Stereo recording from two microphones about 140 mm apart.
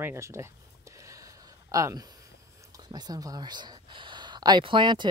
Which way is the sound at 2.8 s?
30° right (ahead or behind).